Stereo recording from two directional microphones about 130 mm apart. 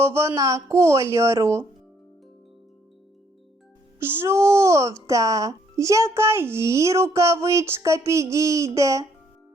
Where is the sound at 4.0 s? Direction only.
20° right (ahead or behind).